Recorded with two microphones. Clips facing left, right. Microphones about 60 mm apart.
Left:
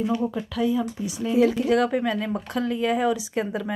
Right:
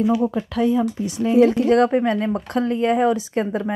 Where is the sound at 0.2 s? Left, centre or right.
Right.